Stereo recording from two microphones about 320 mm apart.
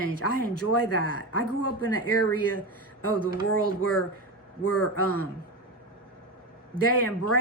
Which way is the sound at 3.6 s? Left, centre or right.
Left.